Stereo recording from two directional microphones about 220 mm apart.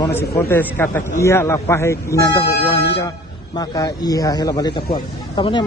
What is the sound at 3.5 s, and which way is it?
A man's voice, 20° left (ahead or behind).